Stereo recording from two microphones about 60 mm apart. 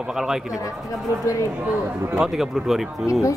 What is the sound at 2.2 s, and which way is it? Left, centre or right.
Speech, centre.